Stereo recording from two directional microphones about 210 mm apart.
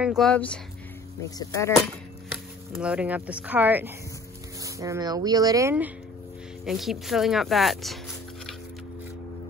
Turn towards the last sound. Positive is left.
turn(degrees=0)  # may be behind; listen again after turning